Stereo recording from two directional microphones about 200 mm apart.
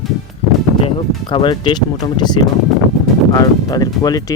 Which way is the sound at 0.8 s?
25° left (ahead or behind).